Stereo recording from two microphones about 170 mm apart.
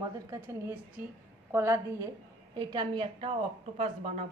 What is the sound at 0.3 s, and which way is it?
A woman's voice, 15° right (ahead or behind).